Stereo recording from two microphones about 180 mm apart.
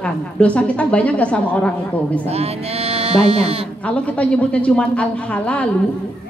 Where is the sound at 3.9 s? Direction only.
5° left (ahead or behind).